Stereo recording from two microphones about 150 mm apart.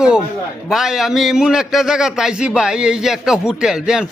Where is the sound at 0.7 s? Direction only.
5° right (ahead or behind).